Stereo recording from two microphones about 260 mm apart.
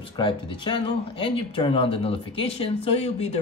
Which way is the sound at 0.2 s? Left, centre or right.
Centre.